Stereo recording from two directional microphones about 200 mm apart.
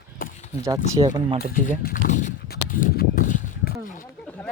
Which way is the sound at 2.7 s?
45° left (ahead or behind).